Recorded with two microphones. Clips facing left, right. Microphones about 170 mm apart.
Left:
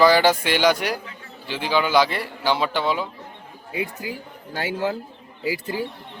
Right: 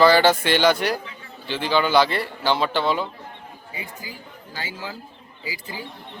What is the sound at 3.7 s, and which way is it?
Speech, 70° left (ahead or behind).